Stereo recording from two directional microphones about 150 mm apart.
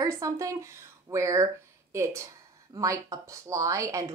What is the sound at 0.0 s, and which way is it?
Speech, 20° right (ahead or behind).